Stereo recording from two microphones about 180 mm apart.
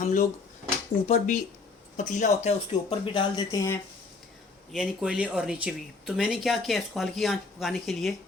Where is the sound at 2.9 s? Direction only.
25° left (ahead or behind).